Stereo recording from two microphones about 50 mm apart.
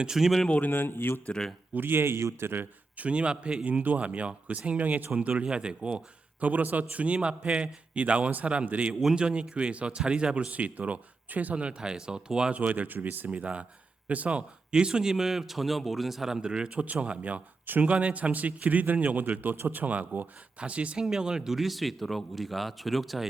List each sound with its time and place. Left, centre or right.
0.0 s speech: centre
0.6 s speech: left
1.7 s a man's voice: right
3.0 s speech: right
6.4 s speech: right
10.5 s speech: right
12.5 s a man's voice: right
21.0 s speech: centre